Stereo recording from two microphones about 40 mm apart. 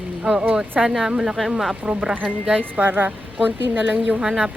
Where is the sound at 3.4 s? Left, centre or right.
Right.